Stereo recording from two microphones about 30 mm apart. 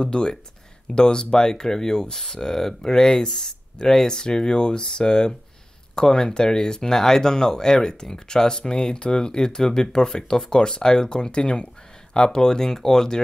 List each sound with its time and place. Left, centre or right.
0.0 s speech: left